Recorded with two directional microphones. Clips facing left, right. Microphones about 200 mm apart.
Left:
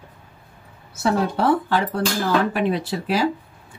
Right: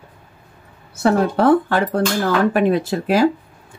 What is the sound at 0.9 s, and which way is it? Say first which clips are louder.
Speech: right 5 dB; 55° right (ahead or behind).